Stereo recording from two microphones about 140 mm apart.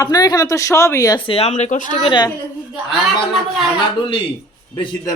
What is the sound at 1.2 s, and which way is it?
Speech, 45° left (ahead or behind).